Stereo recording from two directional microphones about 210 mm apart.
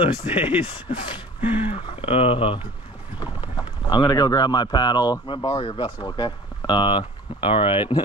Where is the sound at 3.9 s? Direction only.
20° left (ahead or behind).